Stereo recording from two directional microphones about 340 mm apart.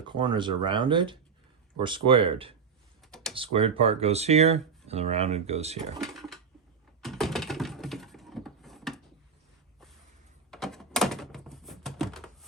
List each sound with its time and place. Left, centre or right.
0.0 s speech: centre
6.1 s sewing machine: centre
7.0 s typing: centre
10.5 s a sound: centre